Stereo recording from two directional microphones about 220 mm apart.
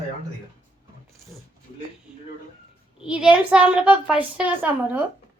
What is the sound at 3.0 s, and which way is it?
A woman's voice, 5° right (ahead or behind).